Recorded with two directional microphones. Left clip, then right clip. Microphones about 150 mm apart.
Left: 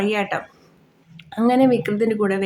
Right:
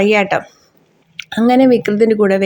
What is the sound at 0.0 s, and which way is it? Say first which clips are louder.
Speech: right 9 dB; 35° right (ahead or behind).